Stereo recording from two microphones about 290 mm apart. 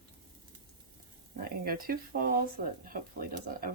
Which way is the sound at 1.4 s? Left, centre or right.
Right.